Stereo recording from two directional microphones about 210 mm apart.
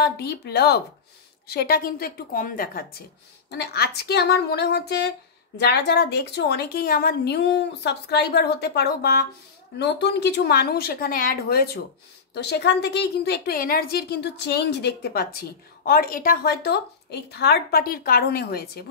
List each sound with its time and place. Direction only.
0.0 s a woman's voice: 50° left (ahead or behind)